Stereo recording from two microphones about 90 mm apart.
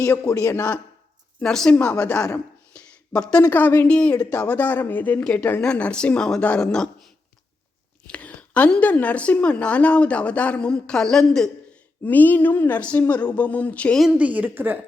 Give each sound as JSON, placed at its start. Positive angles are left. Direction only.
{"t": 0.3, "sound": "speech", "side_deg": 30}
{"t": 1.4, "sound": "a woman's voice", "side_deg": 5}
{"t": 2.7, "sound": "a sound", "side_deg": 10}
{"t": 3.4, "sound": "a woman's voice", "side_deg": 20}
{"t": 8.0, "sound": "a woman's voice", "side_deg": 15}
{"t": 12.0, "sound": "a woman's voice", "side_deg": 20}
{"t": 14.0, "sound": "a woman's voice", "side_deg": -15}